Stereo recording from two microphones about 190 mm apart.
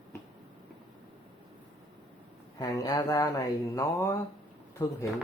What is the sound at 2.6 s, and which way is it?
Speech, 20° left (ahead or behind).